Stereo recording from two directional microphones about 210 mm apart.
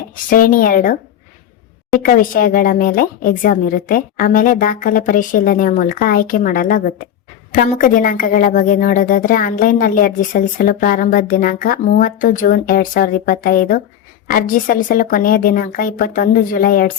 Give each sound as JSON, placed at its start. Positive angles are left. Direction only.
{"t": 0.3, "sound": "a woman's voice", "side_deg": 40}